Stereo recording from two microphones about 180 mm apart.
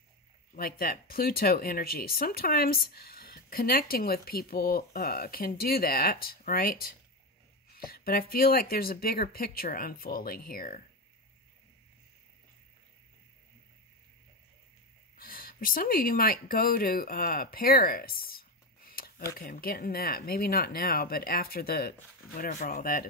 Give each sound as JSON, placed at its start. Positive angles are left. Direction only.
{"t": 0.6, "sound": "speech", "side_deg": 55}
{"t": 15.1, "sound": "speech", "side_deg": 55}
{"t": 18.9, "sound": "a sound", "side_deg": 55}
{"t": 19.3, "sound": "speech", "side_deg": 55}